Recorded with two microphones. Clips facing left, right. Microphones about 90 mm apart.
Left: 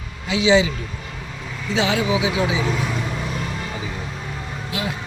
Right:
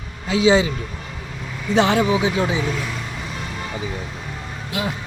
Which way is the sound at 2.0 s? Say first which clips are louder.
Right 2 dB; 10° left (ahead or behind).